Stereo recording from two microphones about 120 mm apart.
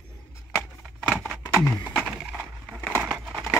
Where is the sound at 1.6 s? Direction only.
30° left (ahead or behind).